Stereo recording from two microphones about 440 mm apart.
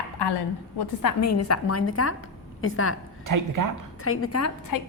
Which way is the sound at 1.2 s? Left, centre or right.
Left.